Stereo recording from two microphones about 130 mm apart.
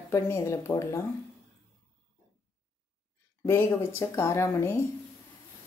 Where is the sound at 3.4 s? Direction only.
20° left (ahead or behind).